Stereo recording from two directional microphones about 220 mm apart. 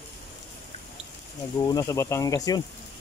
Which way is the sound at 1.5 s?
15° left (ahead or behind).